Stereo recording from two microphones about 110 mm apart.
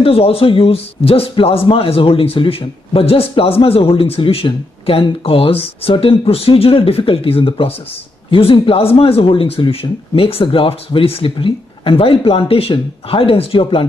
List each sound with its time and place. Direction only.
0.0 s a man's voice: 60° left (ahead or behind)